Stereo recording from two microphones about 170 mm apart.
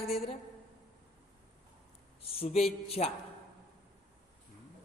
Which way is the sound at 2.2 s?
35° left (ahead or behind).